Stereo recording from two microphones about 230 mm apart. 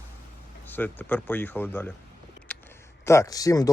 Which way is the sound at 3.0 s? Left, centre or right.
Centre.